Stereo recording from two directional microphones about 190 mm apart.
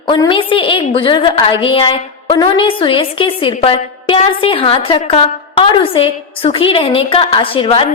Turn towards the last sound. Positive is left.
turn(degrees=30)  # may be behind; listen again after turning